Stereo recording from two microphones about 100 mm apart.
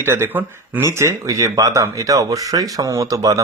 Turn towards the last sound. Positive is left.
turn(degrees=-35)  # may be behind; listen again after turning